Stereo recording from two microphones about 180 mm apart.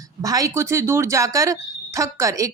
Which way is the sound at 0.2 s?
20° right (ahead or behind).